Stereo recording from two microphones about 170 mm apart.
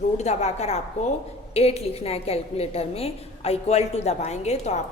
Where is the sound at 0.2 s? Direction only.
40° left (ahead or behind).